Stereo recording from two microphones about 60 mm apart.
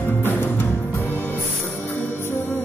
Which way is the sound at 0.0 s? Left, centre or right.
Left.